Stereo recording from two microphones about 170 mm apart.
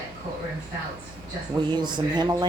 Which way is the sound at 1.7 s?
25° right (ahead or behind).